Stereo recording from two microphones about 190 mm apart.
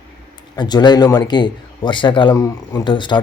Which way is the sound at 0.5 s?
20° left (ahead or behind).